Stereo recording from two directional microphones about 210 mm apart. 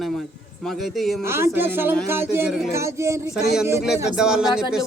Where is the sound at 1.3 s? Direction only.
10° right (ahead or behind).